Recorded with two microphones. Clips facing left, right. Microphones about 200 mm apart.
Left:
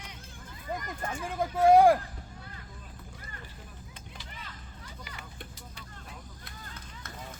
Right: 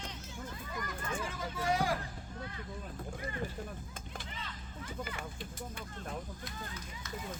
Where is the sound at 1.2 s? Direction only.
55° left (ahead or behind).